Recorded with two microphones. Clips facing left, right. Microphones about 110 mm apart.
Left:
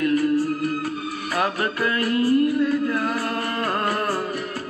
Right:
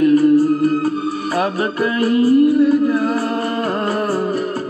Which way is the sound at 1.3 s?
25° right (ahead or behind).